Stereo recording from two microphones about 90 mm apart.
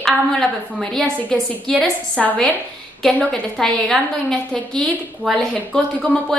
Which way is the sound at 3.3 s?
5° left (ahead or behind).